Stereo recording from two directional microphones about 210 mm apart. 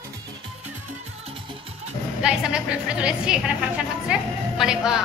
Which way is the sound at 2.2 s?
5° right (ahead or behind).